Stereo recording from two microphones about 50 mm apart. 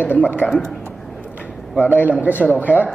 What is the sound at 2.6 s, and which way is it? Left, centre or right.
Speech, right.